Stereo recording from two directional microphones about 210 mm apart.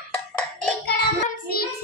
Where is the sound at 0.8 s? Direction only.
45° left (ahead or behind).